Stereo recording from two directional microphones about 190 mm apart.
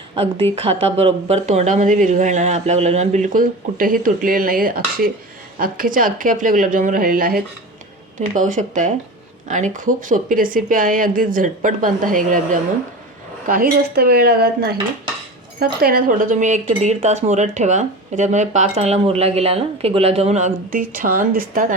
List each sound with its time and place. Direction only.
0.5 s speech: 30° right (ahead or behind)
13.5 s speech: 50° right (ahead or behind)